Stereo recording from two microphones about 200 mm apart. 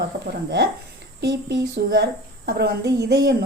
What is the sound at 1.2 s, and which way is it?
A woman's voice, 55° right (ahead or behind).